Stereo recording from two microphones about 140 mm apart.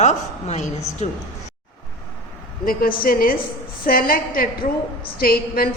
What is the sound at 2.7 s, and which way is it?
A woman's voice, 90° left.